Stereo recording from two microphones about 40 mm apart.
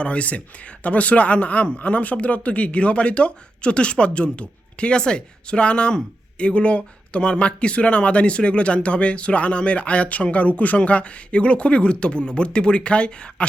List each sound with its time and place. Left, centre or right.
0.0 s speech: left